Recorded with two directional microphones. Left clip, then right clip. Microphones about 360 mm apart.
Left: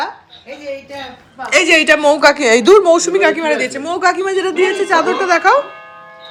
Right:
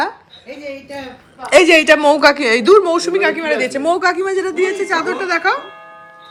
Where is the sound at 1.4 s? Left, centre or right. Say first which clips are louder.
Right 1 dB; centre.